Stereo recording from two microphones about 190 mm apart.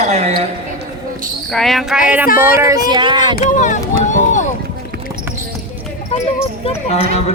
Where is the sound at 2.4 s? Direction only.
15° right (ahead or behind).